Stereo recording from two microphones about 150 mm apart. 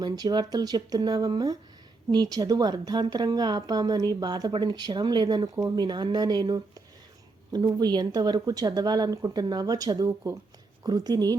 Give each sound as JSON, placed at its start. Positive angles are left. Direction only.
{"t": 0.0, "sound": "a woman's voice", "side_deg": -25}